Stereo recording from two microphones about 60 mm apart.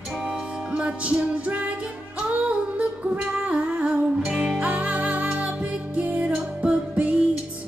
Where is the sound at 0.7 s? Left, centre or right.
Right.